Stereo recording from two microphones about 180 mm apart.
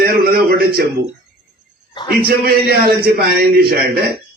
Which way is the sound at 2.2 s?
60° right (ahead or behind).